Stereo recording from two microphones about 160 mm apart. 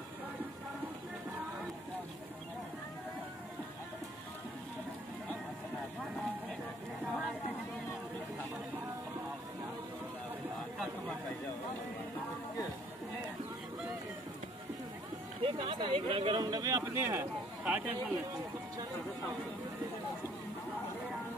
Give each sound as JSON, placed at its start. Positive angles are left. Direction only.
{"t": 15.4, "sound": "speech", "side_deg": -35}